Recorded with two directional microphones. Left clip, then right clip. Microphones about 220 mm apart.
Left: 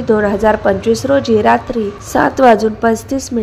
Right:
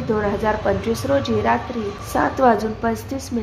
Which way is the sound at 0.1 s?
25° left (ahead or behind).